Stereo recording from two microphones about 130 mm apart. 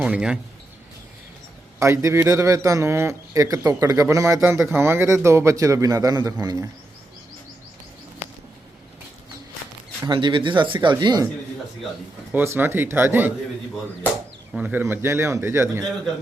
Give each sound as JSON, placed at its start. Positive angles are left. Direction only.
{"t": 0.0, "sound": "speech", "side_deg": -5}
{"t": 1.8, "sound": "a man's voice", "side_deg": -25}
{"t": 10.1, "sound": "speech", "side_deg": -35}
{"t": 12.3, "sound": "speech", "side_deg": -15}
{"t": 14.5, "sound": "a man's voice", "side_deg": -15}